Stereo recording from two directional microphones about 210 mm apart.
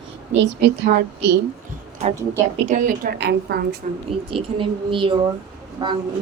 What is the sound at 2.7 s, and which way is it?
A woman's voice, 40° right (ahead or behind).